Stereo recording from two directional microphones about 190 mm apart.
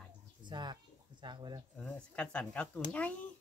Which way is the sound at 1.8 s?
5° left (ahead or behind).